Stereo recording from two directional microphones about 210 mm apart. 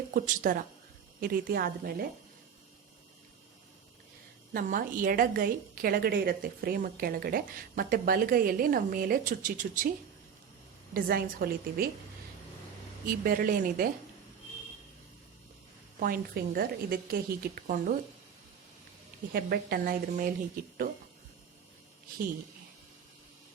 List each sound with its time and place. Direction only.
0.1 s a woman's voice: 40° right (ahead or behind)
4.5 s a woman's voice: 40° right (ahead or behind)
10.9 s a woman's voice: 45° right (ahead or behind)
13.1 s a woman's voice: 45° right (ahead or behind)
16.0 s a woman's voice: 45° right (ahead or behind)
19.3 s a woman's voice: 45° right (ahead or behind)